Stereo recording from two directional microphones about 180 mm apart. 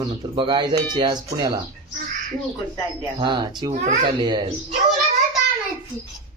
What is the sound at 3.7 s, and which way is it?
Speech, 40° right (ahead or behind).